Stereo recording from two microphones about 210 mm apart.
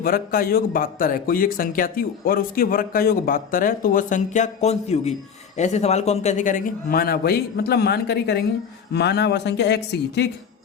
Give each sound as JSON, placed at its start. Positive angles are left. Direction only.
{"t": 0.0, "sound": "speech", "side_deg": 45}